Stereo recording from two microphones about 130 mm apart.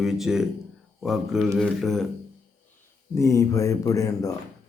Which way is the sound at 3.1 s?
25° left (ahead or behind).